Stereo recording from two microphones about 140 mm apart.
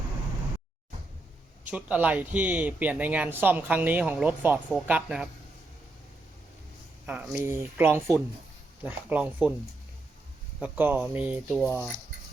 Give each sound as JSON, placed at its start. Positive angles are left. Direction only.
{"t": 1.6, "sound": "speech", "side_deg": -10}
{"t": 7.1, "sound": "speech", "side_deg": -10}
{"t": 10.6, "sound": "speech", "side_deg": -15}